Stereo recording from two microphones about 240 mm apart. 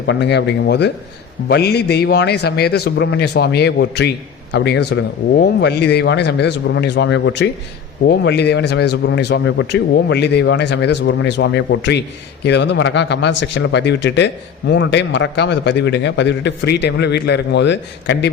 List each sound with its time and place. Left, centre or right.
0.1 s a man's voice: left